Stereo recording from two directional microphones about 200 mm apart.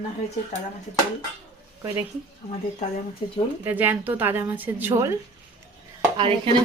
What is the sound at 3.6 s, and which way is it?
Speech, 10° right (ahead or behind).